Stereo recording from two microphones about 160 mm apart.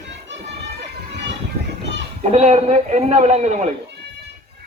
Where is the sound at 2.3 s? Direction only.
40° right (ahead or behind).